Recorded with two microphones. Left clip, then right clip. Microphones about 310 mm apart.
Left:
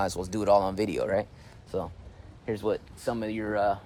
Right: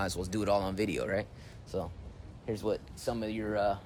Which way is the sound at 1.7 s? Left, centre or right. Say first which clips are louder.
Left 4 dB; left.